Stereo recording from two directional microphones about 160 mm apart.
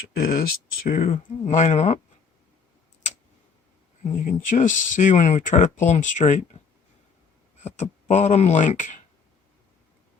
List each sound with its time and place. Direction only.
0.2 s speech: 70° left (ahead or behind)
1.1 s speech: 45° left (ahead or behind)
4.2 s speech: 55° left (ahead or behind)
7.6 s speech: 45° left (ahead or behind)